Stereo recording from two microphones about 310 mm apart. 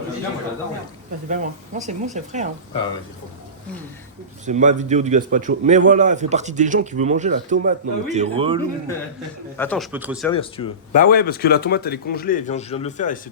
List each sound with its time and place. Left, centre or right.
1.3 s a man's voice: right
4.4 s a man's voice: right
9.6 s a man's voice: centre
10.3 s speech: centre